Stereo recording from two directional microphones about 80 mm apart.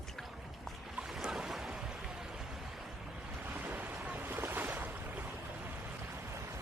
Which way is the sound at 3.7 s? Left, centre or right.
Right.